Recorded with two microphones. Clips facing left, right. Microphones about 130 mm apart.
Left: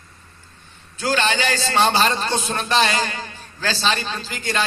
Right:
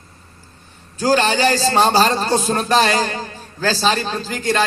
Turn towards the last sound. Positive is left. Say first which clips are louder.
# right 5 dB
turn(degrees=-40)  # may be behind; listen again after turning